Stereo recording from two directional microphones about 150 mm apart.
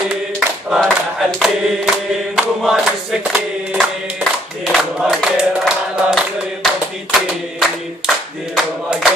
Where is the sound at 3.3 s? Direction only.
5° right (ahead or behind).